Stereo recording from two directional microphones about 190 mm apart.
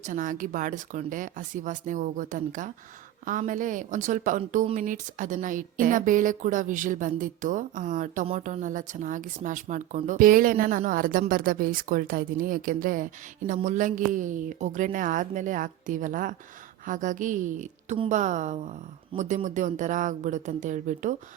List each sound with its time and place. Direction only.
0.0 s a woman's voice: 45° right (ahead or behind)